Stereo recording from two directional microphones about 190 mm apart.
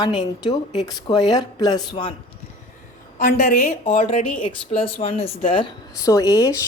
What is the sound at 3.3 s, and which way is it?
A woman's voice, 40° left (ahead or behind).